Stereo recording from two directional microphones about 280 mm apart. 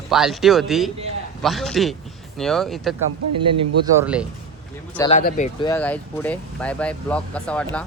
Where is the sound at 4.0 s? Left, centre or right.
Centre.